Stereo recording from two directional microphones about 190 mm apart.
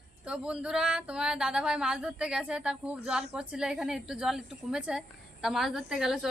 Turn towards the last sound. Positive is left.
turn(degrees=0)  # may be behind; listen again after turning